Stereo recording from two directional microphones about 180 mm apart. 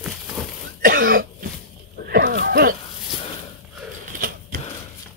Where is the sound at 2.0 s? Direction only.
60° right (ahead or behind).